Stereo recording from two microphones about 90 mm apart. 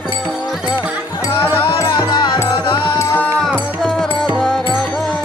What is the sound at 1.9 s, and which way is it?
Music, 55° left (ahead or behind).